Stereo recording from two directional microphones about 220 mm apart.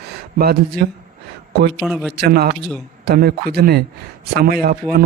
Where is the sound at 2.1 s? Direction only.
45° right (ahead or behind).